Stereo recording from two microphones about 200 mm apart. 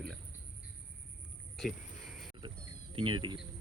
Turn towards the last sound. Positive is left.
turn(degrees=-25)  # may be behind; listen again after turning